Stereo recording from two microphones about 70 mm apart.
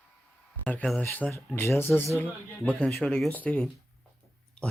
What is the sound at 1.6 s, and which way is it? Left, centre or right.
Speech, left.